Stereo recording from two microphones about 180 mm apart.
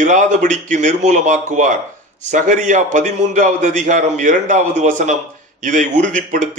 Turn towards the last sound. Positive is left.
turn(degrees=-45)  # may be behind; listen again after turning